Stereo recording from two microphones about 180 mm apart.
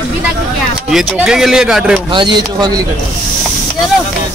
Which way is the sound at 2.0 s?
25° right (ahead or behind).